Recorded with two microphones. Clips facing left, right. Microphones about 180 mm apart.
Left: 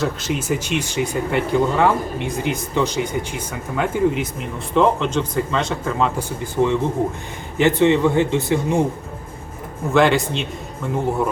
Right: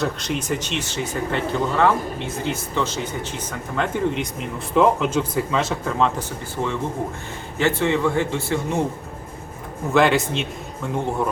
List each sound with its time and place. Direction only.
0.0 s speech: 5° left (ahead or behind)
6.1 s a man's voice: 15° left (ahead or behind)
9.9 s a man's voice: centre (ahead or behind)